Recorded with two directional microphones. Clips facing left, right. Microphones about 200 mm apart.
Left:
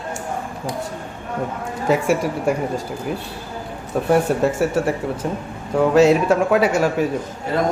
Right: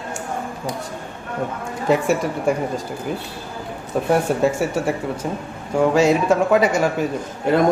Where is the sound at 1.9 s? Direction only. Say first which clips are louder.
Even; 5° left (ahead or behind).